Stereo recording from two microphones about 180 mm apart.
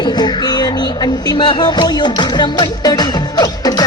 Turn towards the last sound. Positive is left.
turn(degrees=20)  # may be behind; listen again after turning